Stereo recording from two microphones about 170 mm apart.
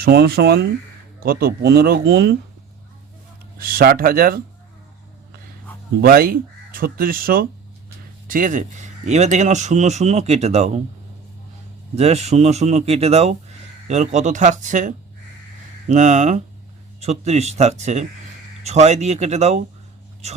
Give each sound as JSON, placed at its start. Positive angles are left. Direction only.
{"t": 0.0, "sound": "speech", "side_deg": -65}
{"t": 3.6, "sound": "speech", "side_deg": -60}
{"t": 6.0, "sound": "speech", "side_deg": -60}
{"t": 11.9, "sound": "speech", "side_deg": -40}